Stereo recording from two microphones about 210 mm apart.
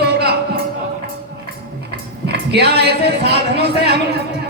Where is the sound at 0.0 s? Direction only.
50° right (ahead or behind).